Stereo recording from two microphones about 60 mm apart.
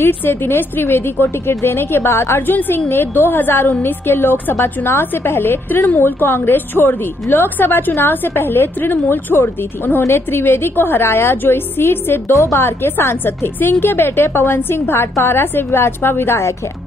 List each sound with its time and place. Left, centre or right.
0.0 s a woman's voice: left